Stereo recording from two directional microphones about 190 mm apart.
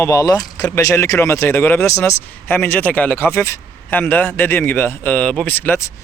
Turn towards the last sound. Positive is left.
turn(degrees=15)  # may be behind; listen again after turning